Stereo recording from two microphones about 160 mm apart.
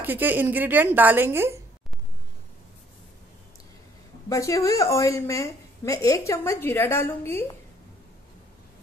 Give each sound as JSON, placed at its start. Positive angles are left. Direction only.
{"t": 0.0, "sound": "a woman's voice", "side_deg": -10}
{"t": 4.3, "sound": "a woman's voice", "side_deg": 20}